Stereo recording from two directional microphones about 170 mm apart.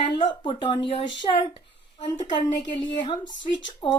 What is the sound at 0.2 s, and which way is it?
Speech, 30° left (ahead or behind).